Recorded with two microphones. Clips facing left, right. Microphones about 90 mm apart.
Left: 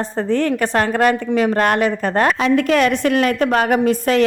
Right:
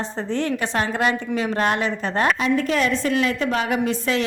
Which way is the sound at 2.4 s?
70° left (ahead or behind).